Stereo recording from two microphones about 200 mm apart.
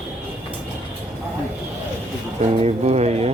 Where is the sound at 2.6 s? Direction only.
30° right (ahead or behind).